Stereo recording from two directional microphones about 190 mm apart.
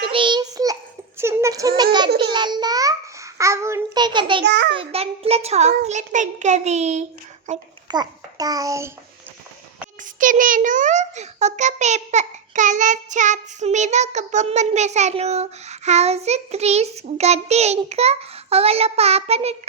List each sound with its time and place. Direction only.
0.0 s child singing: 25° right (ahead or behind)
2.1 s a child's voice: 25° right (ahead or behind)
4.4 s a child's voice: 65° right (ahead or behind)
4.8 s a child's voice: 30° right (ahead or behind)
7.9 s a child's voice: 20° right (ahead or behind)
10.2 s a child's voice: 45° right (ahead or behind)